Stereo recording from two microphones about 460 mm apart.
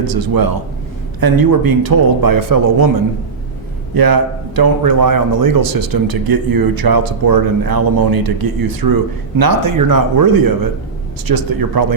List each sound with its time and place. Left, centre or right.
0.1 s a man's voice: right
3.9 s a man's voice: right